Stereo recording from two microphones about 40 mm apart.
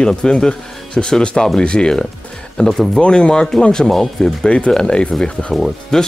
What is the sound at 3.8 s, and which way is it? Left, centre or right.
Speech, centre.